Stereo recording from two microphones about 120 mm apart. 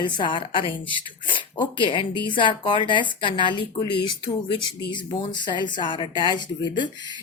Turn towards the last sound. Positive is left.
turn(degrees=40)  # may be behind; listen again after turning